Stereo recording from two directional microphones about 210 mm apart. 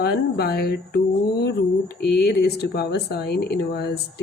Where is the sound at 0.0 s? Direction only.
50° left (ahead or behind).